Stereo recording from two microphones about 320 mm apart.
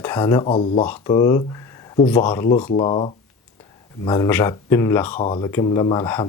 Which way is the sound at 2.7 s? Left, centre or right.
Centre.